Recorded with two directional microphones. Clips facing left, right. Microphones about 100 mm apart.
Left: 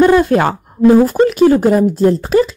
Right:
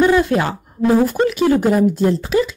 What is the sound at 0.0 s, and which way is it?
Speech, 50° left (ahead or behind).